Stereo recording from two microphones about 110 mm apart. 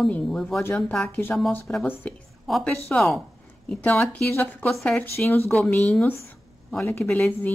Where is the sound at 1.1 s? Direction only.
20° left (ahead or behind).